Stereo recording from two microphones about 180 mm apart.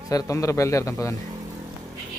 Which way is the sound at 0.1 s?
15° left (ahead or behind).